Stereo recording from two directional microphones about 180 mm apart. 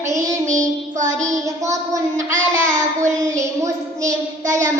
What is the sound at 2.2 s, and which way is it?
Child singing, 45° right (ahead or behind).